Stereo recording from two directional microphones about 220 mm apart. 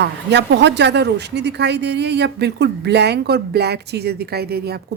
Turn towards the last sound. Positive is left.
turn(degrees=-45)  # may be behind; listen again after turning